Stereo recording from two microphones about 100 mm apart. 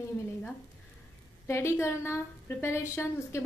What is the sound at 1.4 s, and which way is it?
A woman's voice, 25° left (ahead or behind).